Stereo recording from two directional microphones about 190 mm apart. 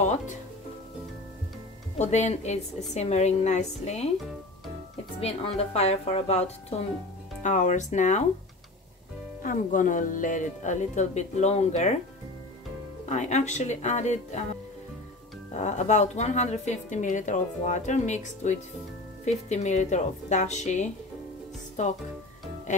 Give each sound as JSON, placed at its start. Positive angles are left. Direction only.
{"t": 2.0, "sound": "a woman's voice", "side_deg": 35}
{"t": 5.2, "sound": "a woman's voice", "side_deg": 35}
{"t": 9.4, "sound": "speech", "side_deg": 45}
{"t": 13.1, "sound": "a woman's voice", "side_deg": 40}
{"t": 15.5, "sound": "a woman's voice", "side_deg": 40}